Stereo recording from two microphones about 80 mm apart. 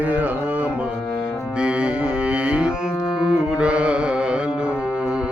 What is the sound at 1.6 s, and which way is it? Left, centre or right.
Music, centre.